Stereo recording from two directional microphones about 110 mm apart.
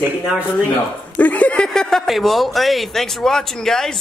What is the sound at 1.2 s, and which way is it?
Speech, 15° left (ahead or behind).